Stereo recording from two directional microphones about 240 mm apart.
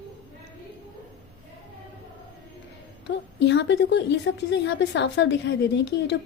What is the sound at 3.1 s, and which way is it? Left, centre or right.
A woman's voice, left.